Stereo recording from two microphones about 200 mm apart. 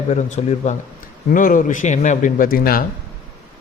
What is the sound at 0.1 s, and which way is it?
A man's voice, 35° left (ahead or behind).